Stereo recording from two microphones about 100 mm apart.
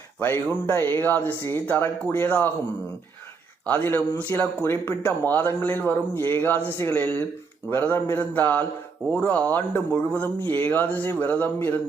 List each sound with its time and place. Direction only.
0.2 s speech: 20° left (ahead or behind)
4.3 s speech: 20° left (ahead or behind)
8.1 s a sound: 20° left (ahead or behind)
9.0 s speech: 15° left (ahead or behind)